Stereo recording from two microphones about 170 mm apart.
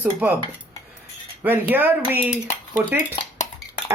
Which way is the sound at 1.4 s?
10° right (ahead or behind).